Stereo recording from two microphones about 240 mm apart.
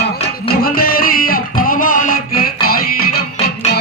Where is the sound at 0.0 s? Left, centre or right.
Left.